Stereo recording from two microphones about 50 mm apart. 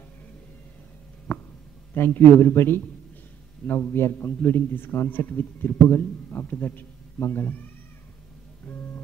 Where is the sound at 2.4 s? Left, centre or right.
Left.